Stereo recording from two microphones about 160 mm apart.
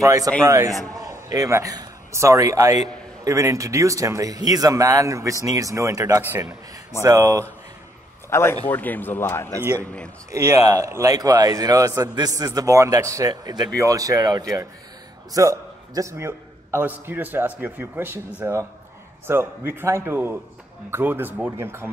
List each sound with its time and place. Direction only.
0.0 s a man's voice: 20° right (ahead or behind)
8.3 s a man's voice: 15° left (ahead or behind)
10.3 s a man's voice: 20° right (ahead or behind)